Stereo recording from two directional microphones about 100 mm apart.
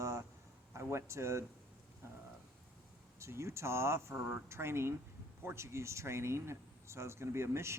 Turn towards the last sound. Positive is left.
turn(degrees=-25)  # may be behind; listen again after turning